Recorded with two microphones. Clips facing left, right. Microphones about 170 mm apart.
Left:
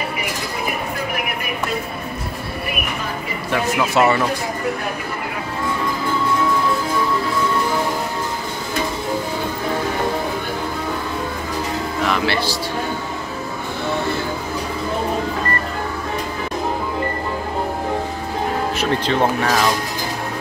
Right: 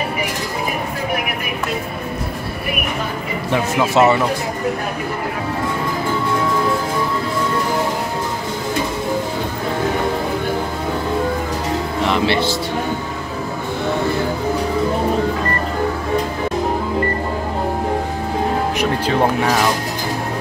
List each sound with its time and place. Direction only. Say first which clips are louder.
3.5 s speech: right 2 dB; 20° right (ahead or behind)
12.0 s music: right 3 dB; 25° right (ahead or behind)